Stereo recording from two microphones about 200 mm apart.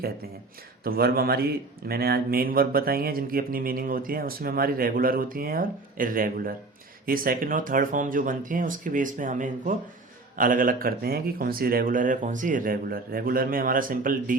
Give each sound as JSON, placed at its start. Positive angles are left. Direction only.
{"t": 0.9, "sound": "a man's voice", "side_deg": -50}